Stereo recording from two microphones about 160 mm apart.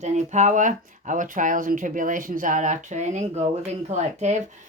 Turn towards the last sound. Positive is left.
turn(degrees=-45)  # may be behind; listen again after turning